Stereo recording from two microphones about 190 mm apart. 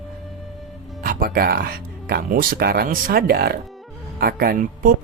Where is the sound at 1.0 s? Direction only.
50° right (ahead or behind).